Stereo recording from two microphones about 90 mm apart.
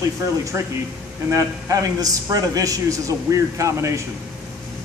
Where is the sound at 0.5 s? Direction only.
25° right (ahead or behind).